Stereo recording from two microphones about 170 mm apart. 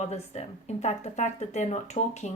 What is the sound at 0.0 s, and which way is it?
Speech, 40° left (ahead or behind).